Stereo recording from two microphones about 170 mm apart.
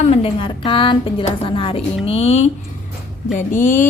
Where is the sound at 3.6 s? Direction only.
50° left (ahead or behind).